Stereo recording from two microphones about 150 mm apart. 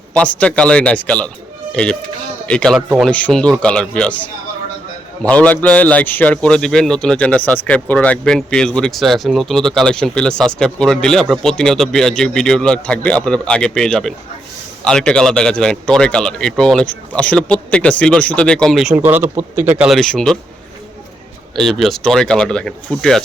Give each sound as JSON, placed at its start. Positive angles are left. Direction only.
{"t": 0.2, "sound": "speech", "side_deg": 10}
{"t": 2.7, "sound": "a man's voice", "side_deg": -5}
{"t": 3.1, "sound": "speech", "side_deg": 10}
{"t": 5.3, "sound": "a man's voice", "side_deg": 10}
{"t": 18.9, "sound": "a man's voice", "side_deg": -15}
{"t": 19.9, "sound": "a man's voice", "side_deg": 0}
{"t": 21.5, "sound": "a man's voice", "side_deg": 0}